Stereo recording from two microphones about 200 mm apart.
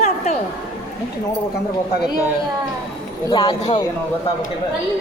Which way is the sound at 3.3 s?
20° left (ahead or behind).